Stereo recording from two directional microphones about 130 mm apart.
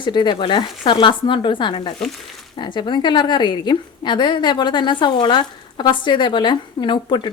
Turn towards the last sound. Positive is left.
turn(degrees=40)  # may be behind; listen again after turning